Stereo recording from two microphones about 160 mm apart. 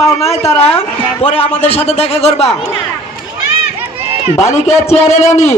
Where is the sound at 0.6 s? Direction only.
40° left (ahead or behind).